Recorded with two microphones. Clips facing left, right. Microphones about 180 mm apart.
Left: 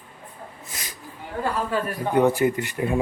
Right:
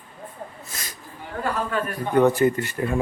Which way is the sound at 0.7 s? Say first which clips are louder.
Even; 15° left (ahead or behind).